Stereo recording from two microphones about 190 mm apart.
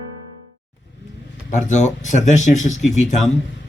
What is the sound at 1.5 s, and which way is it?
Speech, 40° left (ahead or behind).